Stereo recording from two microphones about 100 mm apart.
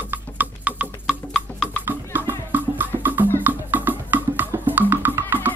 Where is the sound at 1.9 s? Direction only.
25° right (ahead or behind).